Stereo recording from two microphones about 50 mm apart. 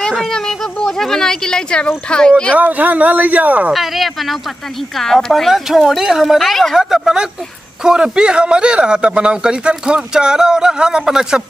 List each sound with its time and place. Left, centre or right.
0.3 s speech: centre
2.5 s speech: right
3.7 s a woman's voice: centre
6.8 s a man's voice: centre